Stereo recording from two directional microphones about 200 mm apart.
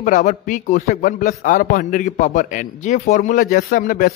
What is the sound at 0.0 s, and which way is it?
A man's voice, 40° left (ahead or behind).